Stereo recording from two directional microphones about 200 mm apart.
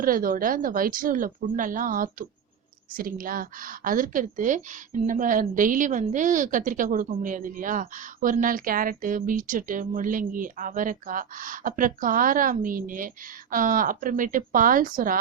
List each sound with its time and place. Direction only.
0.0 s speech: 45° right (ahead or behind)